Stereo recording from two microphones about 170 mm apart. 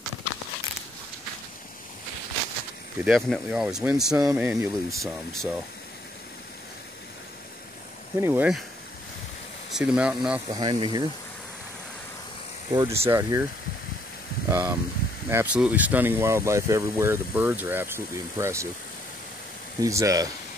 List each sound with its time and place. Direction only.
3.0 s speech: centre (ahead or behind)
8.2 s speech: 15° right (ahead or behind)
9.7 s speech: 5° right (ahead or behind)
10.5 s speech: 25° right (ahead or behind)
12.7 s speech: 15° right (ahead or behind)
14.5 s speech: 20° right (ahead or behind)
19.8 s speech: 20° right (ahead or behind)